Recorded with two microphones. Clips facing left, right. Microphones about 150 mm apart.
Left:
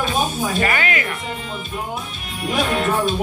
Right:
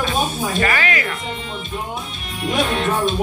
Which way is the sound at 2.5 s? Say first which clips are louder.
Even; 5° left (ahead or behind).